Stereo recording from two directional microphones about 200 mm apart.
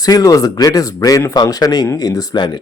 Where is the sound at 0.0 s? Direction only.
20° left (ahead or behind).